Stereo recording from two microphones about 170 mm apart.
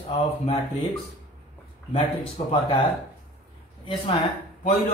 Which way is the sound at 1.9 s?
35° left (ahead or behind).